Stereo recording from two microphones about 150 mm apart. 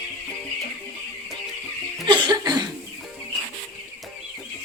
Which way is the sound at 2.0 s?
30° right (ahead or behind).